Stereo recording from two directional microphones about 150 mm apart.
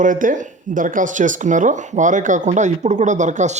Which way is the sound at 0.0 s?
60° right (ahead or behind).